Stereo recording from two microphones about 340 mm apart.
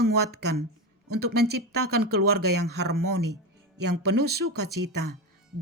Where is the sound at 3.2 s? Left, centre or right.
Right.